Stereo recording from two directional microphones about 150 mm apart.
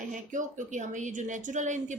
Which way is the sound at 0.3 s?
55° right (ahead or behind).